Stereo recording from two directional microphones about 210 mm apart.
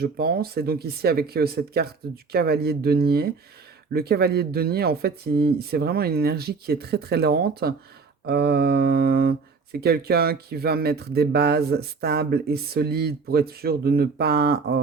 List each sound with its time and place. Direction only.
0.0 s speech: 45° right (ahead or behind)